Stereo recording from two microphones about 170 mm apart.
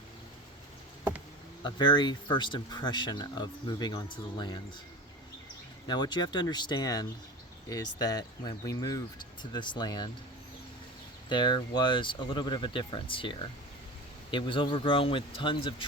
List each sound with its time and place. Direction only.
1.6 s speech: 25° left (ahead or behind)
5.9 s speech: 25° left (ahead or behind)
11.3 s speech: 25° left (ahead or behind)